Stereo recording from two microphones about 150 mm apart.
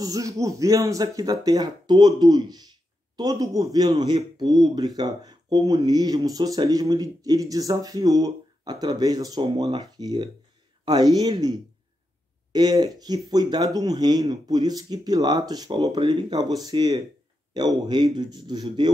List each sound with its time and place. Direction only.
0.0 s speech: 25° right (ahead or behind)
12.5 s speech: 25° right (ahead or behind)